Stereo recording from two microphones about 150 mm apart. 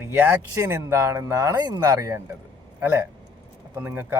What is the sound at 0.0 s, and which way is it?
Speech, 10° right (ahead or behind).